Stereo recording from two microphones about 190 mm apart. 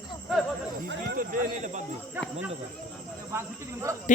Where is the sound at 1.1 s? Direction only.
45° right (ahead or behind).